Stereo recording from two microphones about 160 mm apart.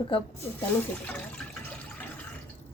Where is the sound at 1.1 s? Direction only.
10° left (ahead or behind).